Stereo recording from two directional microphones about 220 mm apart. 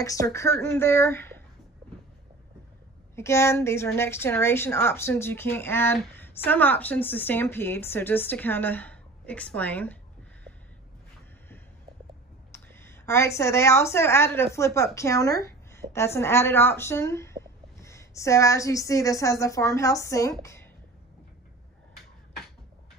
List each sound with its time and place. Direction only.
0.0 s a woman's voice: 15° left (ahead or behind)
3.2 s a woman's voice: 10° left (ahead or behind)
12.5 s a woman's voice: 10° left (ahead or behind)